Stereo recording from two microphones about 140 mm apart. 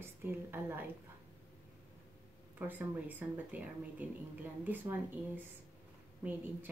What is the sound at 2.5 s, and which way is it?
Speech, 15° right (ahead or behind).